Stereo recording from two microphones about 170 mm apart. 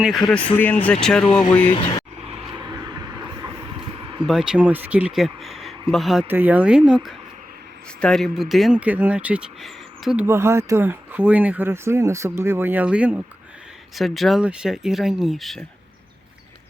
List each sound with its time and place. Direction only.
0.0 s speech: centre (ahead or behind)
1.7 s speech: 30° left (ahead or behind)
2.5 s a sound: 20° right (ahead or behind)
4.3 s speech: 5° right (ahead or behind)
6.2 s speech: 10° right (ahead or behind)
10.2 s speech: 15° right (ahead or behind); by 15.6 s centre (ahead or behind)